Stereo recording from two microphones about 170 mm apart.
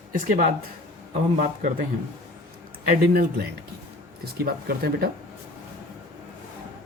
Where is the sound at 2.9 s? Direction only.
60° right (ahead or behind).